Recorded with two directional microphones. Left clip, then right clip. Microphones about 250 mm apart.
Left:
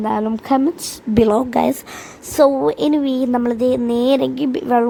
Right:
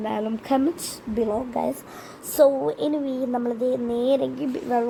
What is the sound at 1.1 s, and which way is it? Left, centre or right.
A woman's voice, left.